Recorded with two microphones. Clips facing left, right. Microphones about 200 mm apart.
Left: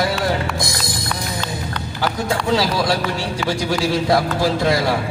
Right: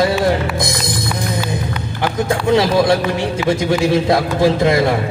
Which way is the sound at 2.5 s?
20° right (ahead or behind).